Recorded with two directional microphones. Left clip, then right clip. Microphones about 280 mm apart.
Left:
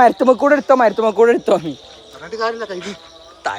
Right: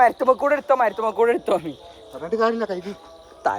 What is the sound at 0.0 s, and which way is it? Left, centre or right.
Speech, left.